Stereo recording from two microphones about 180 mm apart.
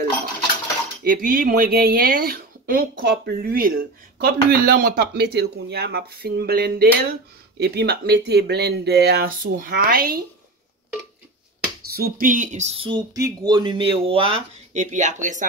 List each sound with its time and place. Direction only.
1.0 s speech: 50° right (ahead or behind)
11.9 s speech: 55° right (ahead or behind)